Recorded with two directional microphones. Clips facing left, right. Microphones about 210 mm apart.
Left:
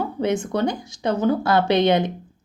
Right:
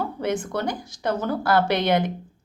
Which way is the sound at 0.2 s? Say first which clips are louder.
Left 6 dB; 20° left (ahead or behind).